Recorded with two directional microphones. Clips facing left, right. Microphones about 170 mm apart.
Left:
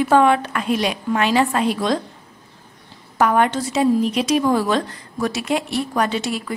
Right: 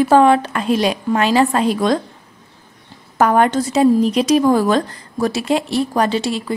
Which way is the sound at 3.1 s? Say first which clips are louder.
Right 3 dB; 40° right (ahead or behind).